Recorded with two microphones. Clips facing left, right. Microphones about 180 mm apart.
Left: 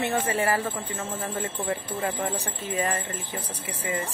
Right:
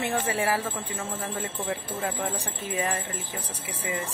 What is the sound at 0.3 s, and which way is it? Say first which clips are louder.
Speech: left 1 dB; 5° right (ahead or behind).